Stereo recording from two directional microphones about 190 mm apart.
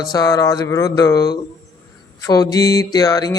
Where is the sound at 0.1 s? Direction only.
20° left (ahead or behind).